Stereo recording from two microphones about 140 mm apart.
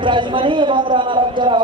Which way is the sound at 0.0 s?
35° right (ahead or behind).